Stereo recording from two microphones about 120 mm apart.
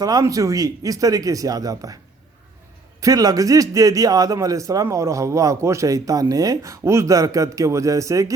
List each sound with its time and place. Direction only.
0.0 s a man's voice: 30° right (ahead or behind)
3.0 s a man's voice: 30° right (ahead or behind)